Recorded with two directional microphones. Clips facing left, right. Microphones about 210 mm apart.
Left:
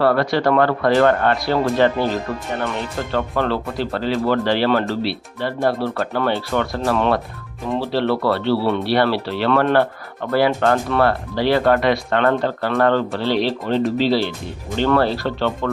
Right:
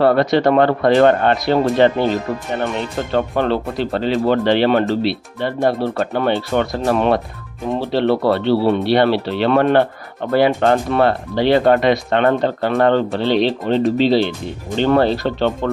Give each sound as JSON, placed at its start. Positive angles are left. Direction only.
{"t": 0.0, "sound": "speech", "side_deg": -20}